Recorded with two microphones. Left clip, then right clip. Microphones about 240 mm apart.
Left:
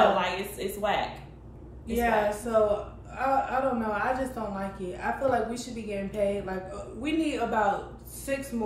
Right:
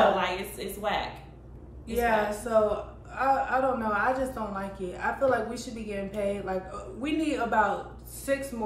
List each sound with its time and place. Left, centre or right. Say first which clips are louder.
0.2 s a woman's voice: left 1 dB; centre
1.9 s a woman's voice: even; centre